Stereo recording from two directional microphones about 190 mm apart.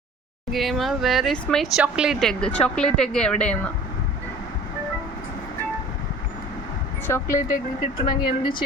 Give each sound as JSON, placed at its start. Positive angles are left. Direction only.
{"t": 0.5, "sound": "speech", "side_deg": 0}
{"t": 7.1, "sound": "speech", "side_deg": 15}
{"t": 7.4, "sound": "speech", "side_deg": 45}
{"t": 8.0, "sound": "speech", "side_deg": 25}